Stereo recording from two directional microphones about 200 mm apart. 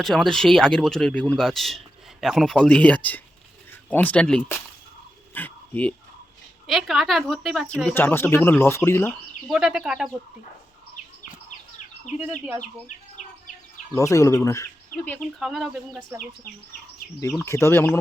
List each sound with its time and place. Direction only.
0.0 s speech: centre (ahead or behind)
5.3 s dog: 10° left (ahead or behind)
6.7 s speech: centre (ahead or behind)
9.5 s speech: centre (ahead or behind)
12.9 s insect: 40° left (ahead or behind)
13.9 s speech: 15° left (ahead or behind)
15.4 s speech: centre (ahead or behind)
17.2 s speech: 15° left (ahead or behind)